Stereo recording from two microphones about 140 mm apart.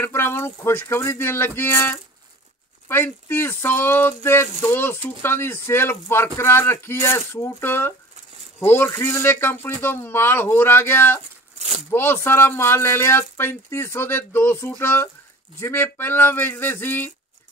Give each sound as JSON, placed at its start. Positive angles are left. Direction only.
{"t": 0.0, "sound": "speech", "side_deg": 15}
{"t": 11.5, "sound": "a sound", "side_deg": -55}
{"t": 11.9, "sound": "speech", "side_deg": 15}